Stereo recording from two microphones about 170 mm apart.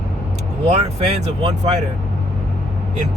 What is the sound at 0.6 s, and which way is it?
Speech, 35° right (ahead or behind).